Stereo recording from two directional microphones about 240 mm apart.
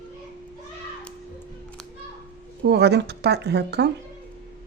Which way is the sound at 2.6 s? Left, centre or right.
Right.